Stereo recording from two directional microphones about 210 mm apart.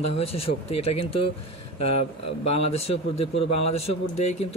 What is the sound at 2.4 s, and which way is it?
Speech, 30° left (ahead or behind).